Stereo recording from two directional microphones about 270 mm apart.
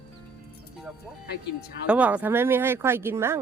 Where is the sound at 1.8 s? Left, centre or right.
Centre.